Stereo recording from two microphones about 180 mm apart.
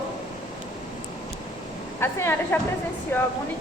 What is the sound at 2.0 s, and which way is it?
A woman's voice, 15° left (ahead or behind).